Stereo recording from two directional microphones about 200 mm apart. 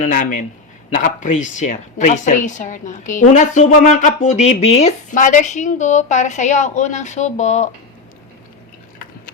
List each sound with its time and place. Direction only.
0.0 s a woman's voice: 40° left (ahead or behind)